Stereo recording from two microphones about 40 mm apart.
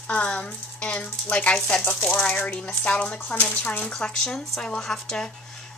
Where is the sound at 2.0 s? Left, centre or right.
Left.